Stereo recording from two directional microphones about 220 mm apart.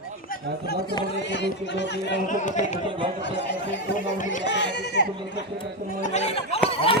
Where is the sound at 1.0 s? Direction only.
50° left (ahead or behind).